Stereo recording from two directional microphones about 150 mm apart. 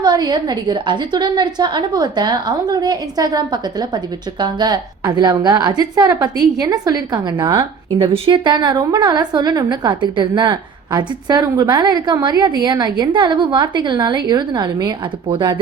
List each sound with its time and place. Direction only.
0.0 s a woman's voice: 30° right (ahead or behind)